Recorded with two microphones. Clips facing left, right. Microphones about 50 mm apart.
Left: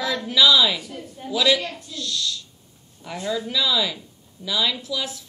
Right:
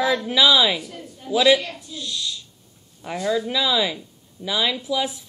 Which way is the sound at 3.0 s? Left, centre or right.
Right.